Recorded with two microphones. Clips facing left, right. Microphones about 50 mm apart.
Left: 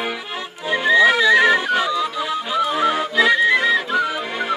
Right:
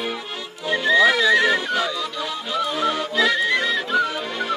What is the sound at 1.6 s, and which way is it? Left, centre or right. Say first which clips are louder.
Music: left 4 dB; left.